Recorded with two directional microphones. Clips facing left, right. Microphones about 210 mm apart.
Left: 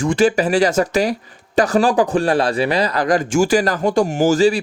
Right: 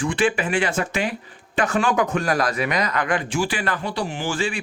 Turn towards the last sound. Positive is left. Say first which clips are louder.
# left 11 dB
turn(degrees=40)  # may be behind; listen again after turning